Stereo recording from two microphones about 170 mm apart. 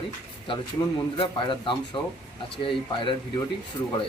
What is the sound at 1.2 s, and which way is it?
Speech, 30° left (ahead or behind).